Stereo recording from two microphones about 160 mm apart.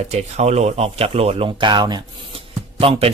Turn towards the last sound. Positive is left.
turn(degrees=-35)  # may be behind; listen again after turning